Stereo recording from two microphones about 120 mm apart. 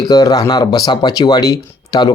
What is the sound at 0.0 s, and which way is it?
Speech, 35° left (ahead or behind).